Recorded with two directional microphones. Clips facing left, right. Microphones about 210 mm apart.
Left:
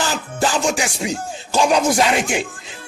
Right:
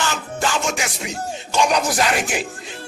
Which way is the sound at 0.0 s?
35° left (ahead or behind).